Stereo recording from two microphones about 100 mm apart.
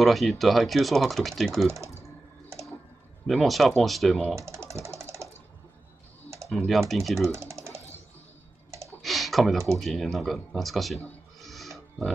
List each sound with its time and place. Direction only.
0.0 s speech: centre (ahead or behind)
3.3 s speech: centre (ahead or behind)
4.4 s a sound: 30° right (ahead or behind)
6.5 s speech: centre (ahead or behind)
7.3 s typing: 30° right (ahead or behind)
9.0 s speech: centre (ahead or behind)
11.4 s pig: centre (ahead or behind)